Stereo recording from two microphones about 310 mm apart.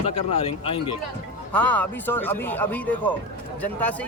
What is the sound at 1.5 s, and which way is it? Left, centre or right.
Speech, centre.